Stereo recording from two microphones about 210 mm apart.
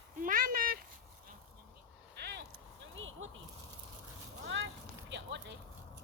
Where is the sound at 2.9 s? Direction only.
70° right (ahead or behind).